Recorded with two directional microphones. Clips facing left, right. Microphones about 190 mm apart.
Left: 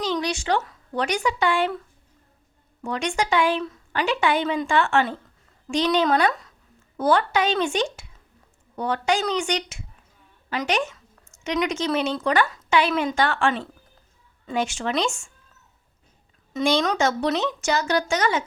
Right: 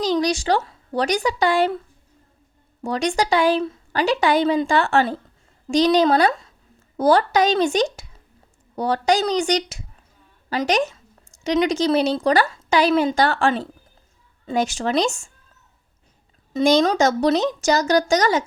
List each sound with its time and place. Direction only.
0.0 s speech: 40° right (ahead or behind)
2.8 s a woman's voice: 35° right (ahead or behind)
16.5 s speech: 35° right (ahead or behind)